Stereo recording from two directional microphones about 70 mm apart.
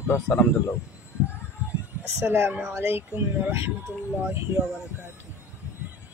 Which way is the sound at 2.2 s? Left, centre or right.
Right.